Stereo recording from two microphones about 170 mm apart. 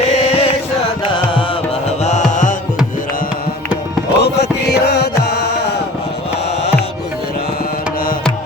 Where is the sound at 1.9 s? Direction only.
40° left (ahead or behind).